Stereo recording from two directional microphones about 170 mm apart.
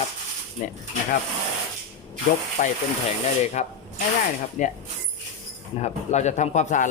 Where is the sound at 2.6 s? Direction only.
45° left (ahead or behind).